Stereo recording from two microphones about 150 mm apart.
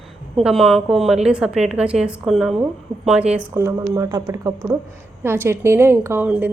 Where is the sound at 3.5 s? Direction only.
20° right (ahead or behind).